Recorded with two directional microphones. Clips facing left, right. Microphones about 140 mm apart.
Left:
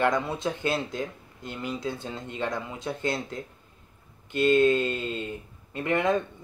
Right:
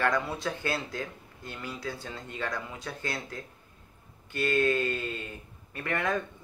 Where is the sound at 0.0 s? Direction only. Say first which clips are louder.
Left 3 dB; 20° left (ahead or behind).